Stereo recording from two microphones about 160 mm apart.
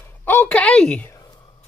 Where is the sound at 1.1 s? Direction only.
25° left (ahead or behind).